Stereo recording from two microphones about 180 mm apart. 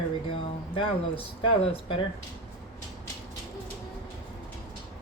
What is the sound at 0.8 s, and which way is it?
Speech, 30° left (ahead or behind).